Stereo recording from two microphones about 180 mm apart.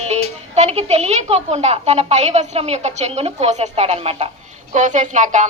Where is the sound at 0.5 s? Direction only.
40° right (ahead or behind).